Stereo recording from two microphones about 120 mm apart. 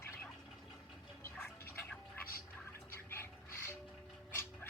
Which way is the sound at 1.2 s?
20° left (ahead or behind).